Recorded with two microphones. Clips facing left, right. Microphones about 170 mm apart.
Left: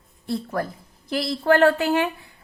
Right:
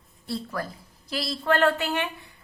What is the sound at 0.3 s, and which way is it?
A woman's voice, 55° left (ahead or behind).